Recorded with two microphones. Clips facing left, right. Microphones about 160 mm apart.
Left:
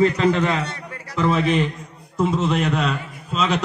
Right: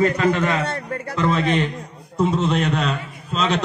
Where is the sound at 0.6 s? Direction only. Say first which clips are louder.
Right 6 dB; 55° right (ahead or behind).